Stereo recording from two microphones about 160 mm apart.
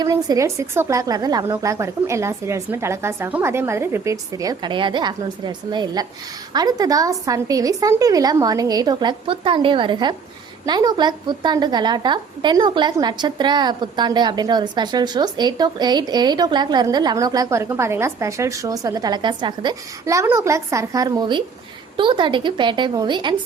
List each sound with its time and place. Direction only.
0.0 s a woman's voice: 20° right (ahead or behind)